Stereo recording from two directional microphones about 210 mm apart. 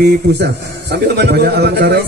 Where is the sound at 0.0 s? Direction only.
55° right (ahead or behind).